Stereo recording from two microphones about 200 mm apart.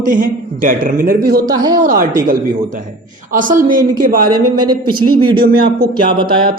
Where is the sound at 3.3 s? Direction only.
40° right (ahead or behind).